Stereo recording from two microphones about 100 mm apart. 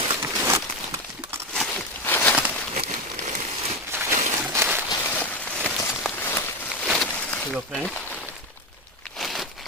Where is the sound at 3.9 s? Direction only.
20° right (ahead or behind).